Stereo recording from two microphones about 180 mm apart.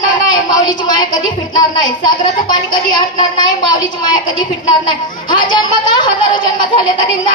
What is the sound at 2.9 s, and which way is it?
A man's voice, 25° left (ahead or behind).